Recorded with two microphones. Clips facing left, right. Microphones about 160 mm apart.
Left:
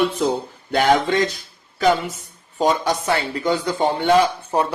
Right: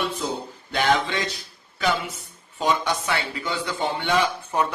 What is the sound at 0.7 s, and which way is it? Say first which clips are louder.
Speech: left 6 dB; 45° left (ahead or behind).